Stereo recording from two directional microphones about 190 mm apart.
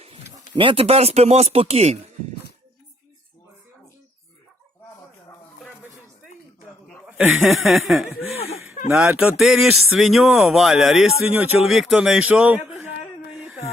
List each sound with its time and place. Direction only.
0.5 s speech: 25° right (ahead or behind)
7.2 s speech: centre (ahead or behind)
8.4 s a sound: 35° left (ahead or behind)
9.0 s a man's voice: 5° right (ahead or behind)
13.3 s wail: centre (ahead or behind)